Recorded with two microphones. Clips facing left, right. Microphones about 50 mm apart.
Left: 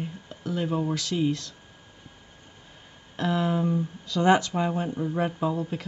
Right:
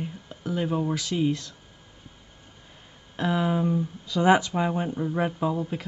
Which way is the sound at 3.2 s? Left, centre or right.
Centre.